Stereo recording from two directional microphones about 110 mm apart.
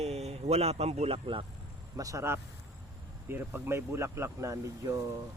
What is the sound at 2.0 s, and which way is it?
Speech, 30° right (ahead or behind).